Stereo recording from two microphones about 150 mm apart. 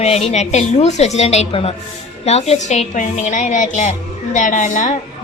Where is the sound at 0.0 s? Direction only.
45° left (ahead or behind).